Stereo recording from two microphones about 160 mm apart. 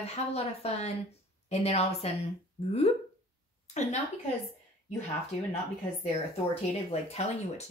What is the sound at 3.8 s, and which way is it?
Speech, 45° left (ahead or behind).